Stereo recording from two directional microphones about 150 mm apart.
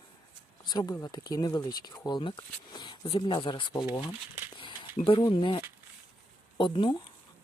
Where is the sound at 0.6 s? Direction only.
30° left (ahead or behind).